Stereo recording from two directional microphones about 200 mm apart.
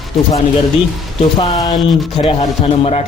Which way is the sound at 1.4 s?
30° left (ahead or behind).